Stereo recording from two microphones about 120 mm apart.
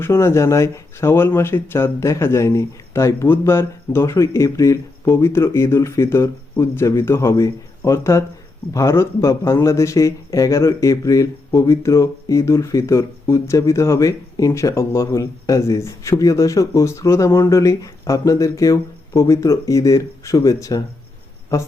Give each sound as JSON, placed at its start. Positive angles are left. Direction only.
{"t": 0.0, "sound": "speech", "side_deg": 20}